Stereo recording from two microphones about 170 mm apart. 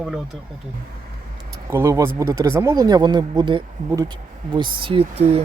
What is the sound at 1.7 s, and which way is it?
Speech, 15° right (ahead or behind).